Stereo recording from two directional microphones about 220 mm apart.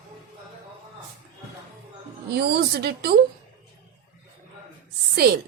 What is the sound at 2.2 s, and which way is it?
Speech, 50° right (ahead or behind).